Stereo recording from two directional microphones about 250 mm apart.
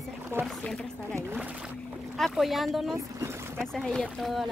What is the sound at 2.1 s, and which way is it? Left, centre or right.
Speech, centre.